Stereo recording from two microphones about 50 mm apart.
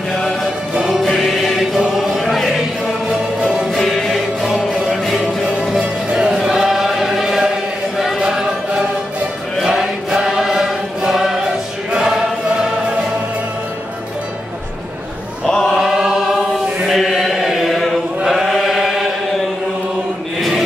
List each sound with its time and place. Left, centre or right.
1.0 s music: centre
1.8 s choir: centre
3.7 s music: centre
4.5 s music: centre
6.1 s chant: centre
9.6 s choir: centre
15.4 s chant: centre
15.7 s chant: centre
20.3 s chant: centre